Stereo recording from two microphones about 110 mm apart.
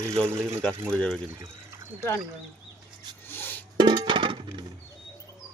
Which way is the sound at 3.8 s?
45° right (ahead or behind).